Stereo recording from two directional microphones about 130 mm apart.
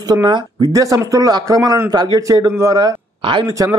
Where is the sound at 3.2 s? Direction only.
40° right (ahead or behind).